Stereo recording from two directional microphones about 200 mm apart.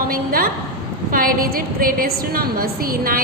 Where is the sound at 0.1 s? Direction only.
45° right (ahead or behind).